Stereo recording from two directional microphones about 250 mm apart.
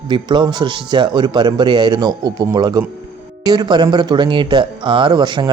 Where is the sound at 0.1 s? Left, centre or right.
Centre.